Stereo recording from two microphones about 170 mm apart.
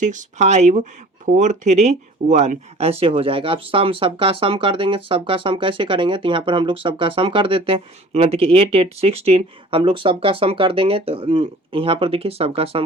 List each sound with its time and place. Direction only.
0.0 s speech: 45° right (ahead or behind)